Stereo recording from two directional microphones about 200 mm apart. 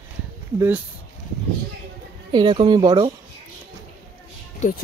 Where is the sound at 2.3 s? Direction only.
20° right (ahead or behind).